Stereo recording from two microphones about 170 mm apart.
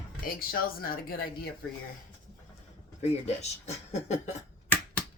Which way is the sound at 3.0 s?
40° left (ahead or behind).